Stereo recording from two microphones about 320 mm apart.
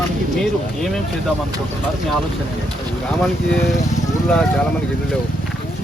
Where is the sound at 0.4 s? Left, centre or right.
Centre.